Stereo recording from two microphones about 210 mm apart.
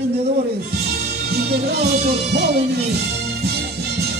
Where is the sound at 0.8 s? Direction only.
50° right (ahead or behind).